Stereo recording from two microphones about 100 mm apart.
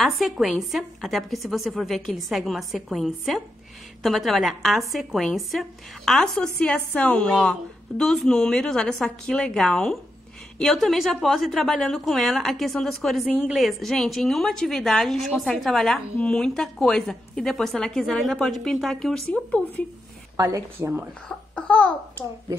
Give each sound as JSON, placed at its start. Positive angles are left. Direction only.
{"t": 0.0, "sound": "a woman's voice", "side_deg": 0}
{"t": 20.3, "sound": "speech", "side_deg": -35}
{"t": 20.8, "sound": "speech", "side_deg": -20}
{"t": 21.3, "sound": "speech", "side_deg": 10}